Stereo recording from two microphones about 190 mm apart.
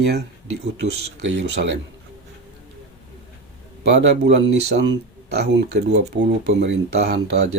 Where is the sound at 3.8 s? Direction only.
65° right (ahead or behind).